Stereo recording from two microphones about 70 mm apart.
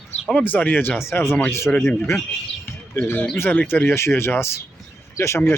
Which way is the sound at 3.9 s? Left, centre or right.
Left.